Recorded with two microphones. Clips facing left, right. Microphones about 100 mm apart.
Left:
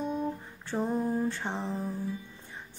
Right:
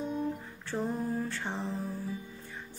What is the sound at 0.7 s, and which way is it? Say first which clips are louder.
Mantra: left 3 dB; 15° left (ahead or behind).